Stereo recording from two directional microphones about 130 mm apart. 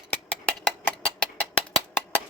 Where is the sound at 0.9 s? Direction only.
10° left (ahead or behind).